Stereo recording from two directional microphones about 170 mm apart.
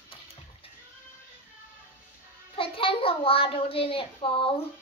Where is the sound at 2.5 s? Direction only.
30° left (ahead or behind).